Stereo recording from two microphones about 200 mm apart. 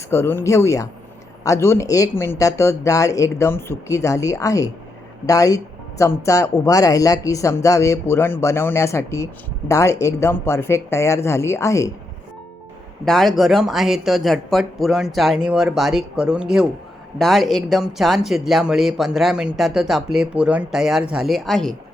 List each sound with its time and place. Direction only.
0.1 s speech: 10° left (ahead or behind)
13.1 s speech: centre (ahead or behind)